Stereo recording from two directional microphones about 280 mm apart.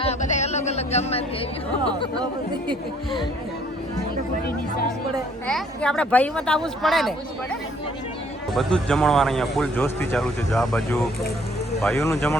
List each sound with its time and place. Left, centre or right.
0.0 s a sound: left
5.5 s speech: centre
8.5 s speech: centre